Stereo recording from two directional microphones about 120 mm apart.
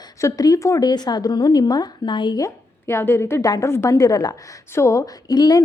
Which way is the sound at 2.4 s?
20° left (ahead or behind).